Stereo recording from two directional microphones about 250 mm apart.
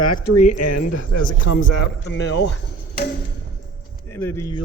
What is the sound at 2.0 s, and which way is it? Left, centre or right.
Speech, left.